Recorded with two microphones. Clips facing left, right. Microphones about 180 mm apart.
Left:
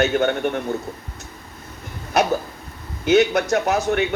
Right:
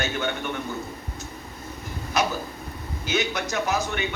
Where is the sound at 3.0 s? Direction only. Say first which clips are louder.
Left 11 dB; 60° left (ahead or behind).